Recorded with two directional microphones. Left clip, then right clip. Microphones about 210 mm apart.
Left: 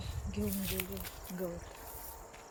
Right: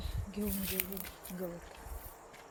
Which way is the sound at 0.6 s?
10° right (ahead or behind).